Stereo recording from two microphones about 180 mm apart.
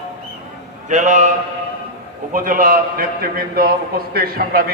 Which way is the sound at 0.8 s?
45° right (ahead or behind).